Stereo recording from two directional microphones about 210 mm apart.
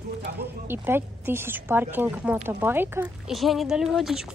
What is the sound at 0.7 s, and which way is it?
Speech, 10° right (ahead or behind).